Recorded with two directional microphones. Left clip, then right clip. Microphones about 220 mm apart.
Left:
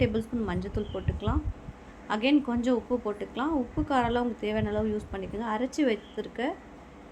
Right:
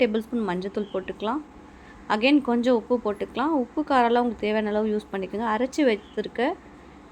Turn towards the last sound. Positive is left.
turn(degrees=-20)  # may be behind; listen again after turning